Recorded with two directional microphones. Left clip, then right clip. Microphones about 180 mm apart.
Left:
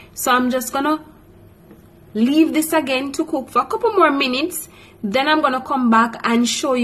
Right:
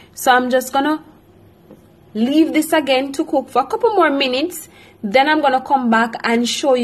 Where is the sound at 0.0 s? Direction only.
20° right (ahead or behind).